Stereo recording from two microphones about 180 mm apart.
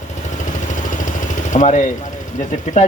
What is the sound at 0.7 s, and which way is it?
Vehicle, 45° left (ahead or behind).